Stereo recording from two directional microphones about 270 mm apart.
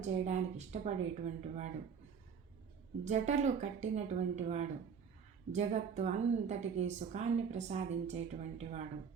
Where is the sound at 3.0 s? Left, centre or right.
Right.